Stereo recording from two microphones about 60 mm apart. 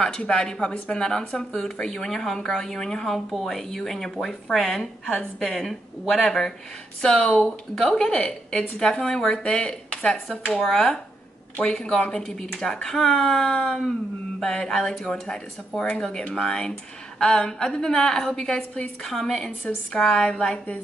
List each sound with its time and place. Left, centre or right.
0.3 s a woman's voice: centre